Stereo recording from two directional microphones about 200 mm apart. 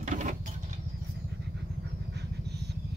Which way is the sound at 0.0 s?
35° right (ahead or behind).